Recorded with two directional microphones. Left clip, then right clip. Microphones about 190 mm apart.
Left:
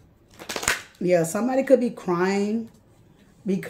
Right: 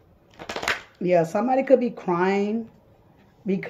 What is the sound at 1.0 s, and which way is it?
Speech, 20° left (ahead or behind).